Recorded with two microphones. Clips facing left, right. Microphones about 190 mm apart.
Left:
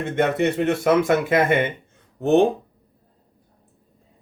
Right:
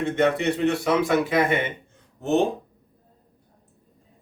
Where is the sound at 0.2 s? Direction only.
50° left (ahead or behind).